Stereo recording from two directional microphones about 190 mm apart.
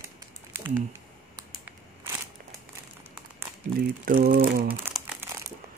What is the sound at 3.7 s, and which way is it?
Speech, 50° right (ahead or behind).